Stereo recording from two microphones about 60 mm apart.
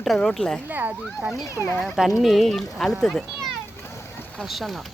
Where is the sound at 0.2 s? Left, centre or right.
Centre.